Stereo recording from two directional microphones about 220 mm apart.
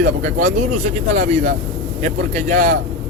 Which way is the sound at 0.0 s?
35° right (ahead or behind).